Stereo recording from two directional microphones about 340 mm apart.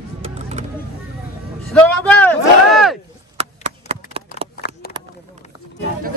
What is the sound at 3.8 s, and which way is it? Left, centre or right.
Chop, centre.